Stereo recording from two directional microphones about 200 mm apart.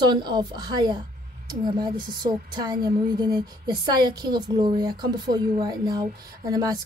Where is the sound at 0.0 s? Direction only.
20° right (ahead or behind).